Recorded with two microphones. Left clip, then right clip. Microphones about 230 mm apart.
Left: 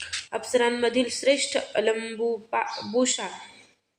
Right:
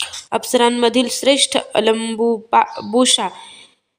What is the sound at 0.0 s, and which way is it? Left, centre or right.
Speech, right.